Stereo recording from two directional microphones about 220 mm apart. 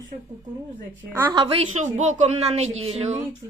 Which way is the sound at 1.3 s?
25° right (ahead or behind).